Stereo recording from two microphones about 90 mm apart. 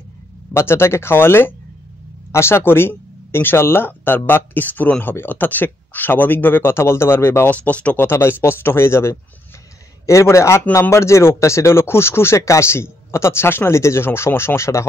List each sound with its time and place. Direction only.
0.5 s speech: 30° left (ahead or behind)